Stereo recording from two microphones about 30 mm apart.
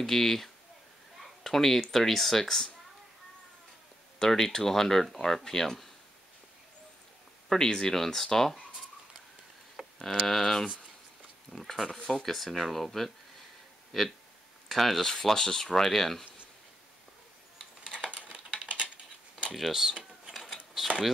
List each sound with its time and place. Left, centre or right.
0.0 s speech: centre
4.2 s speech: centre
7.4 s speech: left
9.8 s a sound: centre
10.2 s speech: centre
15.3 s speech: left
15.6 s speech: centre
18.1 s typing: right
19.7 s mechanisms: centre
20.8 s speech: centre